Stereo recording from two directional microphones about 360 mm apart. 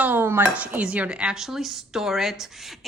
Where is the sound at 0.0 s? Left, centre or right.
Centre.